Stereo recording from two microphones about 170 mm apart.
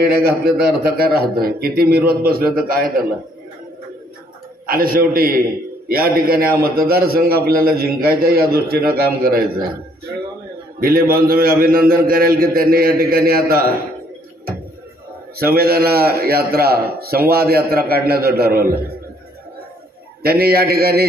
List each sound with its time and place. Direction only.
0.1 s a man's voice: 70° right (ahead or behind)
4.6 s a man's voice: 60° right (ahead or behind)
10.8 s a man's voice: 60° right (ahead or behind)
15.3 s a man's voice: 65° right (ahead or behind)
20.2 s a man's voice: 65° right (ahead or behind)